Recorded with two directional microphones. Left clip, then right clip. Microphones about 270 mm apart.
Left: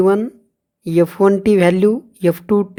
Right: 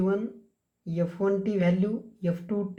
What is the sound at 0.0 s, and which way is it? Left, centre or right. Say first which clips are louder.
A woman's voice: left 14 dB; left.